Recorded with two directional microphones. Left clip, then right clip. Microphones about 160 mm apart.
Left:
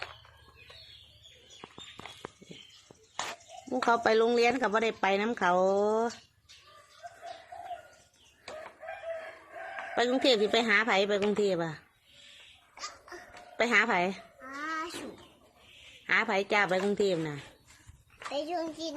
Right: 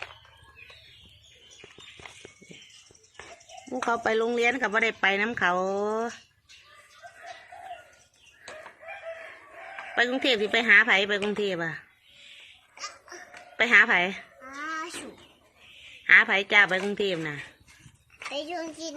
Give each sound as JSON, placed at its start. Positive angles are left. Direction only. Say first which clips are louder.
{"t": 3.7, "sound": "a woman's voice", "louder": "even", "side_deg": 0}
{"t": 9.9, "sound": "a woman's voice", "louder": "right 2 dB", "side_deg": 10}
{"t": 12.7, "sound": "babbling", "louder": "right 3 dB", "side_deg": 15}
{"t": 16.3, "sound": "a woman's voice", "louder": "right 6 dB", "side_deg": 10}
{"t": 18.3, "sound": "a woman's voice", "louder": "even", "side_deg": 15}